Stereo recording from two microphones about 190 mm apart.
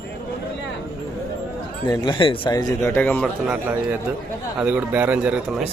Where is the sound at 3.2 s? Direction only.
5° right (ahead or behind).